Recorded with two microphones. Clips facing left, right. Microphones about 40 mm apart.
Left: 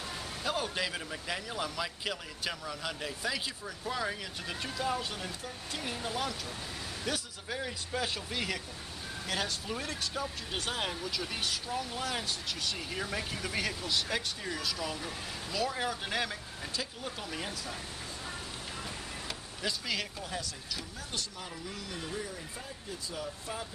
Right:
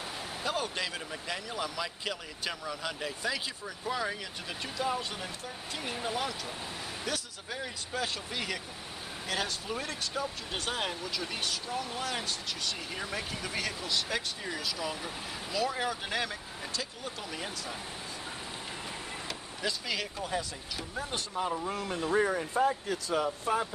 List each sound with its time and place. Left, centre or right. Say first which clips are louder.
0.4 s speech: even; centre
7.1 s speech: left 2 dB; centre
19.2 s speech: right 1 dB; centre
21.1 s speech: right 9 dB; right
22.1 s speech: right 12 dB; right